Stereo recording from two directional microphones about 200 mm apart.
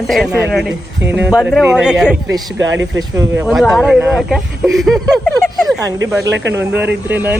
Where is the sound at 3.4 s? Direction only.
Centre (ahead or behind).